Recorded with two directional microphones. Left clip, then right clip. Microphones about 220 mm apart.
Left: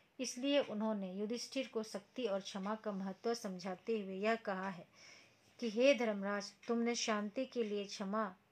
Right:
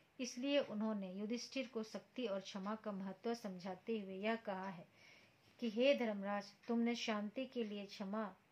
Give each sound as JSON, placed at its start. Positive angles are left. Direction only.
{"t": 0.2, "sound": "a woman's voice", "side_deg": 45}